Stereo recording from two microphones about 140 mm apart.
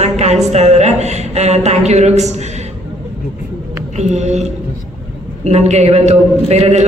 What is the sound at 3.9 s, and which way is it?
A woman's voice, 55° right (ahead or behind).